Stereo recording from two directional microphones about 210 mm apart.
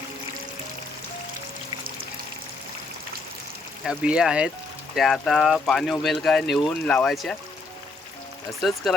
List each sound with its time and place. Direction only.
3.8 s speech: 5° right (ahead or behind)